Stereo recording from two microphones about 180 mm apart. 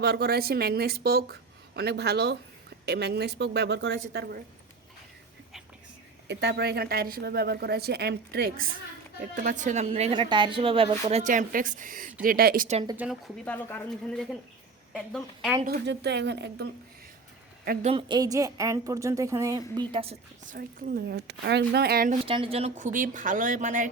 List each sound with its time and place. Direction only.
0.0 s speech: 60° right (ahead or behind)
6.2 s speech: 70° right (ahead or behind)
9.3 s speech: 45° right (ahead or behind)
10.1 s a woman's voice: 25° right (ahead or behind)
11.2 s speech: 45° right (ahead or behind)
13.0 s a woman's voice: 5° right (ahead or behind)
13.4 s a woman's voice: 10° left (ahead or behind)
15.6 s speech: 65° right (ahead or behind)
17.8 s a woman's voice: 25° right (ahead or behind)
19.9 s a woman's voice: 30° right (ahead or behind)
20.4 s speech: 50° right (ahead or behind)
22.3 s speech: 30° right (ahead or behind)